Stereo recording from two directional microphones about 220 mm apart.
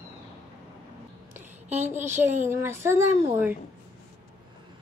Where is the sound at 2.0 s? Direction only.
30° right (ahead or behind).